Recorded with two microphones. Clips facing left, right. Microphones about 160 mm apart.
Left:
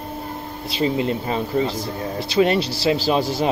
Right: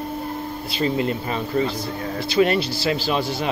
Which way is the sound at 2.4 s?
15° left (ahead or behind).